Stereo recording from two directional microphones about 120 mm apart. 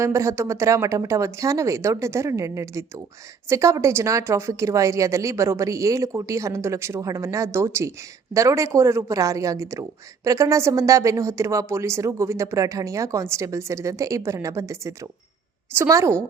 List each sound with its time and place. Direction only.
0.0 s a woman's voice: 25° right (ahead or behind)